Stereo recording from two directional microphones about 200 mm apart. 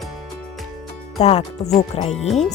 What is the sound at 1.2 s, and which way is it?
Speech, 35° left (ahead or behind).